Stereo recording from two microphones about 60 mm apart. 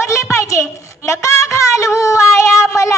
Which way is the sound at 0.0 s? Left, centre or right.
Left.